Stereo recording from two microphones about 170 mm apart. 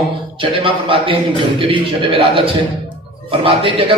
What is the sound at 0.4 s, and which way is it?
A man's voice, 30° right (ahead or behind).